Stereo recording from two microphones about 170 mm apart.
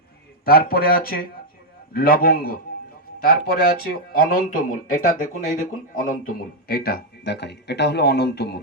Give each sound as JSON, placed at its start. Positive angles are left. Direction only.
{"t": 0.4, "sound": "speech", "side_deg": 60}